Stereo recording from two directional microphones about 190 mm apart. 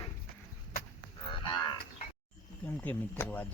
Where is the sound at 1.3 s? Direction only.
25° left (ahead or behind).